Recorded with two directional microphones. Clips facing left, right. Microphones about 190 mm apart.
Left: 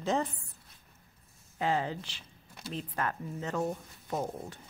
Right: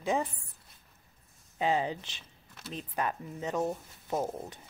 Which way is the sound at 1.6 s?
15° right (ahead or behind).